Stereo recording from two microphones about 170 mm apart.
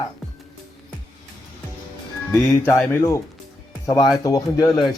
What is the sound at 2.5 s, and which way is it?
Speech, 15° left (ahead or behind).